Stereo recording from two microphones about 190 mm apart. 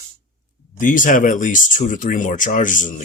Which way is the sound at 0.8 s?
45° left (ahead or behind).